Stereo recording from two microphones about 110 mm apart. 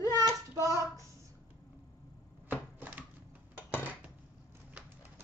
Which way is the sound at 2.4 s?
15° right (ahead or behind).